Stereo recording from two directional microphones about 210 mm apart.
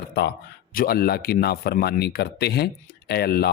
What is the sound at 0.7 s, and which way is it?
Speech, 45° left (ahead or behind).